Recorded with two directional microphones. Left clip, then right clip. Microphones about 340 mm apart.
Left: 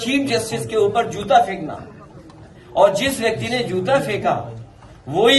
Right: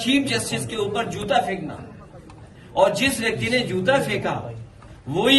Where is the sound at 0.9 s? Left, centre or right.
Centre.